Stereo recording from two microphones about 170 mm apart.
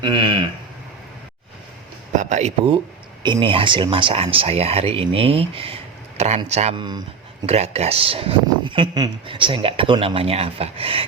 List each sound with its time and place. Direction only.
0.0 s speech: 30° right (ahead or behind)
2.1 s speech: 45° right (ahead or behind)
3.2 s speech: 30° right (ahead or behind)
6.7 s speech: 25° right (ahead or behind)
7.4 s speech: 40° right (ahead or behind)